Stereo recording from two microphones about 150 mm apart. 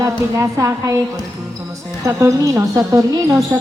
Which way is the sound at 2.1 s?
20° right (ahead or behind).